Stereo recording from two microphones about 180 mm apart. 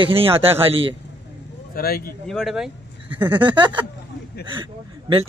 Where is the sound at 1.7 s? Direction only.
55° left (ahead or behind).